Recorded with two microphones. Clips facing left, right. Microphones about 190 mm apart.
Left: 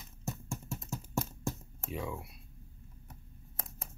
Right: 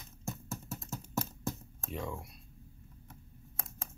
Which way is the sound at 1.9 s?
5° left (ahead or behind).